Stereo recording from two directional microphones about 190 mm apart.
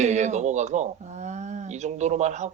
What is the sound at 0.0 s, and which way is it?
Speech, 35° right (ahead or behind).